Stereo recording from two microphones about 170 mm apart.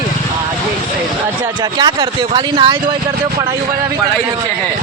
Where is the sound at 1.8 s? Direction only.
25° right (ahead or behind).